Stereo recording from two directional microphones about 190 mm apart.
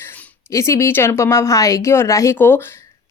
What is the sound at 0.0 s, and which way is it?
A woman's voice, 10° left (ahead or behind).